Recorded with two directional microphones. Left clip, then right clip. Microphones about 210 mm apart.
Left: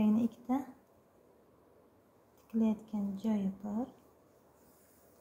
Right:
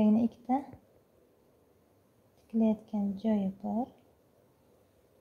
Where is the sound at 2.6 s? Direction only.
30° right (ahead or behind).